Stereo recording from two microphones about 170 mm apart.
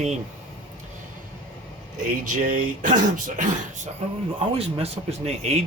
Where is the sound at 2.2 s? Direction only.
50° right (ahead or behind).